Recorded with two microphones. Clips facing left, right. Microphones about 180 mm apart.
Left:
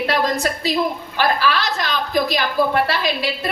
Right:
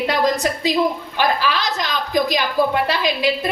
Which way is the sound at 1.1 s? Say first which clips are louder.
Left 4 dB; 15° right (ahead or behind).